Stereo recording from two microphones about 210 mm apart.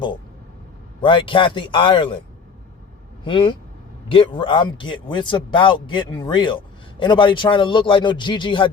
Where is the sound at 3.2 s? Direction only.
25° left (ahead or behind).